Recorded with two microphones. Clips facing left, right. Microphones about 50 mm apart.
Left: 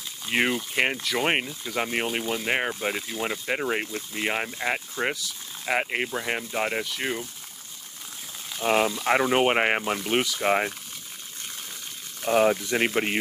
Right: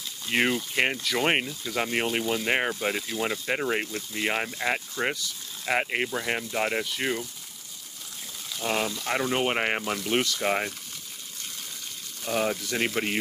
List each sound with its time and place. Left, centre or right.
0.3 s speech: centre
8.5 s speech: left
12.2 s speech: left